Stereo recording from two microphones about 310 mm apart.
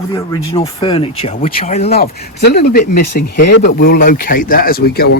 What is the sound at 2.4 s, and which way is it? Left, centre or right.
Speech, left.